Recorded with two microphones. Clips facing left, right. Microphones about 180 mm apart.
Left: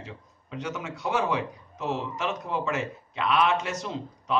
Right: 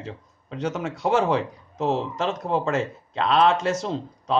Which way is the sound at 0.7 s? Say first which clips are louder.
Right 6 dB; 60° right (ahead or behind).